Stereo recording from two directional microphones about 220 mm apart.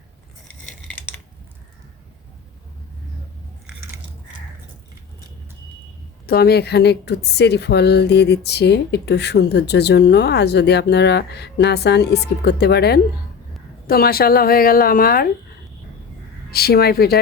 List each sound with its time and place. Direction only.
6.2 s a woman's voice: 45° left (ahead or behind)
16.5 s a woman's voice: 45° left (ahead or behind)